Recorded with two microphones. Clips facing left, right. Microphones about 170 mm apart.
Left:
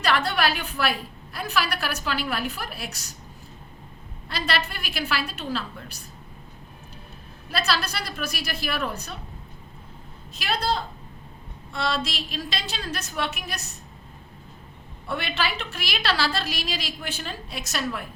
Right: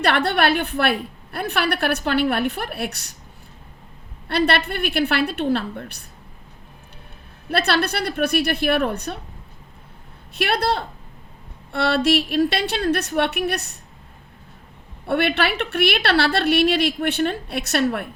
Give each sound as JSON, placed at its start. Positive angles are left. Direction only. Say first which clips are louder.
{"t": 0.0, "sound": "a woman's voice", "louder": "right 5 dB", "side_deg": -60}
{"t": 4.3, "sound": "a woman's voice", "louder": "right 8 dB", "side_deg": -60}
{"t": 7.5, "sound": "a woman's voice", "louder": "right 6 dB", "side_deg": -60}
{"t": 10.3, "sound": "a woman's voice", "louder": "right 5 dB", "side_deg": -65}
{"t": 15.0, "sound": "a woman's voice", "louder": "right 8 dB", "side_deg": -65}